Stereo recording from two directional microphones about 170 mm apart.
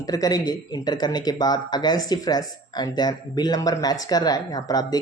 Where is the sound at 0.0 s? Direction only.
20° left (ahead or behind).